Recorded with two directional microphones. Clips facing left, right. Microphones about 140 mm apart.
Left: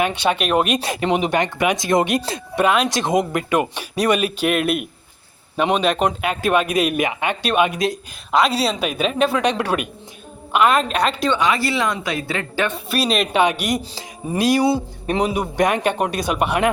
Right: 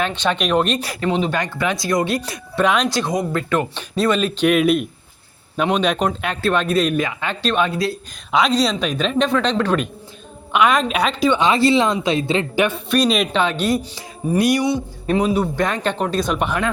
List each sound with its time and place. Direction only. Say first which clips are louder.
0.0 s speech: left 1 dB; 10° left (ahead or behind)
0.8 s speech: left 1 dB; 20° left (ahead or behind)
2.6 s speech: even; 5° left (ahead or behind)
2.9 s a woman's voice: left 2 dB; 20° left (ahead or behind)
8.3 s a woman's voice: right 1 dB; 5° left (ahead or behind)
11.3 s speech: right 4 dB; 25° right (ahead or behind)
12.7 s a woman's voice: right 3 dB; centre (ahead or behind)
13.3 s speech: even; 15° left (ahead or behind)
15.0 s speech: right 4 dB; 15° left (ahead or behind)